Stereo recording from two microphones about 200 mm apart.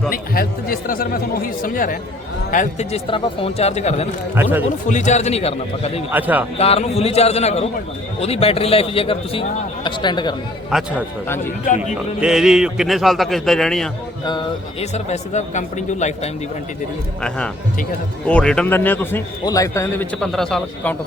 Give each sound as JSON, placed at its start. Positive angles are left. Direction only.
{"t": 0.1, "sound": "a man's voice", "side_deg": 45}
{"t": 6.1, "sound": "a man's voice", "side_deg": -10}
{"t": 6.6, "sound": "a man's voice", "side_deg": 30}
{"t": 10.7, "sound": "a man's voice", "side_deg": 0}
{"t": 11.6, "sound": "speech", "side_deg": 40}
{"t": 12.2, "sound": "a man's voice", "side_deg": -5}
{"t": 14.3, "sound": "speech", "side_deg": 25}
{"t": 17.2, "sound": "a man's voice", "side_deg": 5}
{"t": 20.1, "sound": "a man's voice", "side_deg": 0}